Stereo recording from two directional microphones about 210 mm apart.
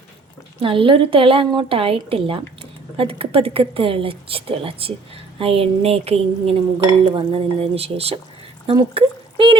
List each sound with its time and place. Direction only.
0.6 s a woman's voice: 25° right (ahead or behind)